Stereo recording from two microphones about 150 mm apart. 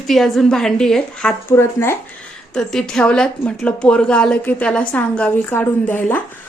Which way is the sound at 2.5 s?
5° left (ahead or behind).